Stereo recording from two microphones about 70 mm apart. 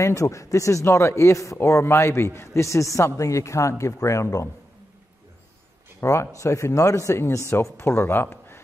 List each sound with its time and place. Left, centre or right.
0.0 s a man's voice: left
5.9 s speech: left